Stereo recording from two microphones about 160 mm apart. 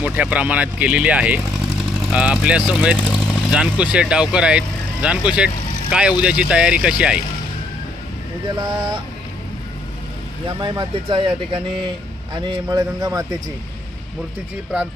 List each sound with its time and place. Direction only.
0.0 s speech: 10° right (ahead or behind)
8.4 s speech: 25° right (ahead or behind)
10.6 s speech: 30° right (ahead or behind)